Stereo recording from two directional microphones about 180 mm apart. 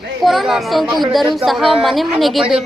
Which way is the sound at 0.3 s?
Centre (ahead or behind).